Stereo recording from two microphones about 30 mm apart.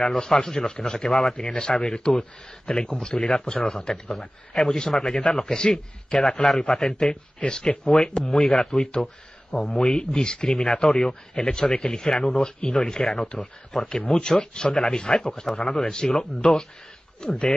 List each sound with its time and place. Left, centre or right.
0.2 s a man's voice: centre
0.8 s a man's voice: centre
1.3 s a man's voice: left
4.6 s a man's voice: centre
6.9 s a man's voice: left